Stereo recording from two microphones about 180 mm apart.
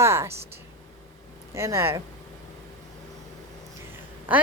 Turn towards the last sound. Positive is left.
turn(degrees=-10)  # may be behind; listen again after turning